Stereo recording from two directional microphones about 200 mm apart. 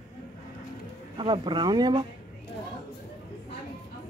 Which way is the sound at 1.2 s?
25° right (ahead or behind).